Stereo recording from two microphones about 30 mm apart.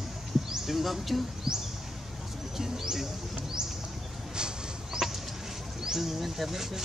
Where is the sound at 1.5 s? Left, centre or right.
Centre.